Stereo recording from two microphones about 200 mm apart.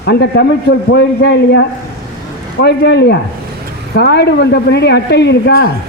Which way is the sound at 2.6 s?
55° left (ahead or behind).